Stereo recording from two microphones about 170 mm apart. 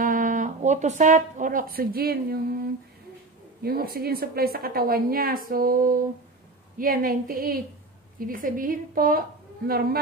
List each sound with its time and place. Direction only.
0.0 s a woman's voice: 50° right (ahead or behind)